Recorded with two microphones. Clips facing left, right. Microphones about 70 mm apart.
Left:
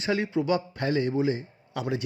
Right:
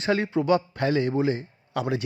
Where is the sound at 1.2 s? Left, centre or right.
Right.